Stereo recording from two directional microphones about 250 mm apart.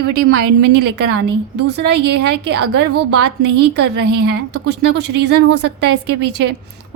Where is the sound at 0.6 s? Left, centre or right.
Right.